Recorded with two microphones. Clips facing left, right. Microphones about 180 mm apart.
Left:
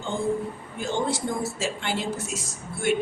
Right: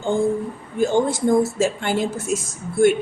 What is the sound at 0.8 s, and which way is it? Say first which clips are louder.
Speech: right 8 dB; 45° right (ahead or behind).